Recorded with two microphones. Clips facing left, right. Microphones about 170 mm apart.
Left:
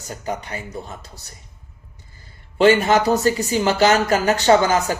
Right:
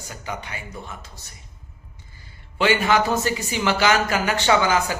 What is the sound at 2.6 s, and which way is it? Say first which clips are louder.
Speech: left 5 dB; 40° left (ahead or behind).